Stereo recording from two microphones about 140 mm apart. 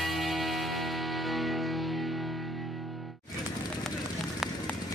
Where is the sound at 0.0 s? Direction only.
Centre (ahead or behind).